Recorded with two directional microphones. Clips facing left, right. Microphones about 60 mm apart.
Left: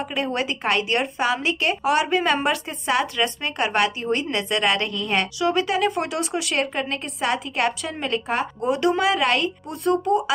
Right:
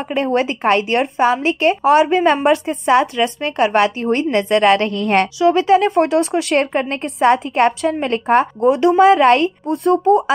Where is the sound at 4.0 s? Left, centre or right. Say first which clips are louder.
Right 7 dB; right.